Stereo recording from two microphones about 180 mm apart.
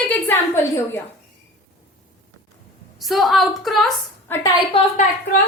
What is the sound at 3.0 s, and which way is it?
Speech, centre (ahead or behind).